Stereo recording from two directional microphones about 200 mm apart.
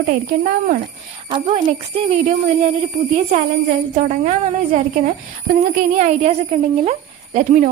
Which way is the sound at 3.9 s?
40° right (ahead or behind).